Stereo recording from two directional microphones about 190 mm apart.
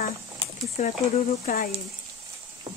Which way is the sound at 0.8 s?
35° left (ahead or behind).